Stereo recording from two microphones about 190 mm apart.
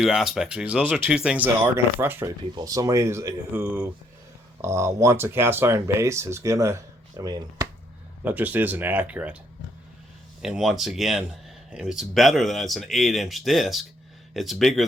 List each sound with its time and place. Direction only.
0.0 s speech: centre (ahead or behind); by 7.7 s 20° right (ahead or behind)
8.2 s speech: 10° right (ahead or behind)
10.4 s speech: centre (ahead or behind)